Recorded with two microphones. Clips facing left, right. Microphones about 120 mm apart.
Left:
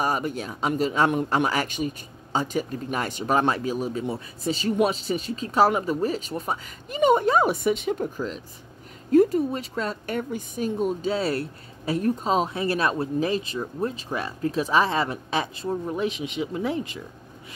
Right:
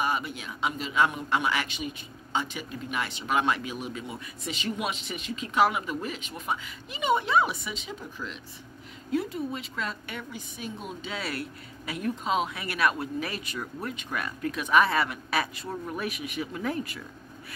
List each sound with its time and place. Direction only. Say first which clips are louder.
0.0 s speech: left 4 dB; 40° left (ahead or behind)
9.1 s speech: left 11 dB; 45° left (ahead or behind); by 17.0 s 20° left (ahead or behind)